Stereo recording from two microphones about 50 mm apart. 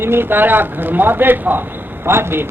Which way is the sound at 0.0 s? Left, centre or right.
Right.